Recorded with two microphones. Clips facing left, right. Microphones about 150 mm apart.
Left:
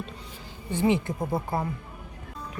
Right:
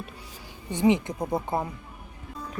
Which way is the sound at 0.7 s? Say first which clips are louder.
Right 2 dB; 15° right (ahead or behind).